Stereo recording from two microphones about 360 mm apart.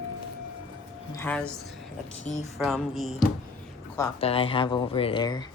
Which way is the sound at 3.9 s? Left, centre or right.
Centre.